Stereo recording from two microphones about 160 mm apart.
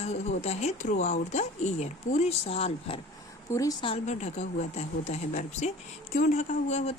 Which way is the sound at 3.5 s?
20° left (ahead or behind).